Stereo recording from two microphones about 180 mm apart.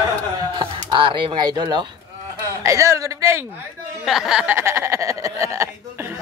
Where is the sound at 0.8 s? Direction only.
30° right (ahead or behind).